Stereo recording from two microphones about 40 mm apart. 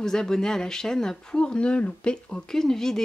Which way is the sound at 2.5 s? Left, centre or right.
Centre.